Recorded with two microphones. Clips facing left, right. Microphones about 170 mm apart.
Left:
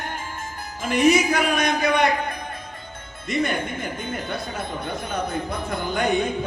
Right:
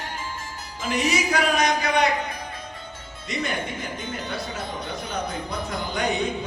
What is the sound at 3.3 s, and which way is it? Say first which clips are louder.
A woman's voice: left 4 dB; 55° left (ahead or behind).